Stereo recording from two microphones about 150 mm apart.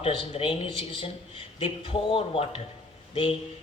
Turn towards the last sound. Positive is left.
turn(degrees=35)  # may be behind; listen again after turning